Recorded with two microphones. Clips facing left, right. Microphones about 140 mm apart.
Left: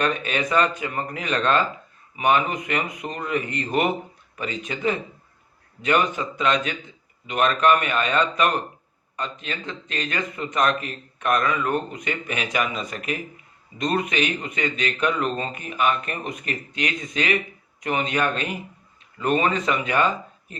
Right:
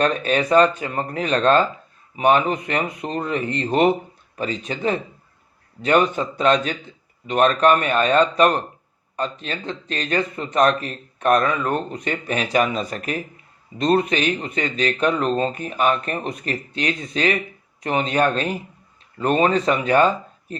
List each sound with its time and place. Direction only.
0.0 s speech: 35° right (ahead or behind)